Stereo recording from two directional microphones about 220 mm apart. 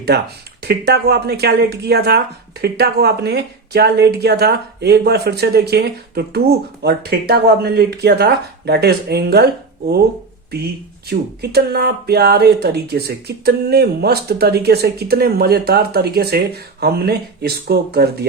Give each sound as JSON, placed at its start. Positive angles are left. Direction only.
{"t": 0.1, "sound": "speech", "side_deg": -45}
{"t": 11.1, "sound": "speech", "side_deg": -45}